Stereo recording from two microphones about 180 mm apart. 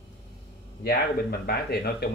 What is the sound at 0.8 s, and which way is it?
Speech, 60° left (ahead or behind).